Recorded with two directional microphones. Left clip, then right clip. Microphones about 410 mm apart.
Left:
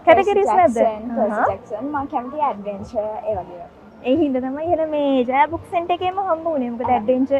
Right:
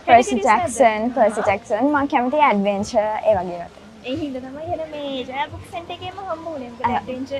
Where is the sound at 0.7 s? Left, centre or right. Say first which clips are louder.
Right 3 dB; right.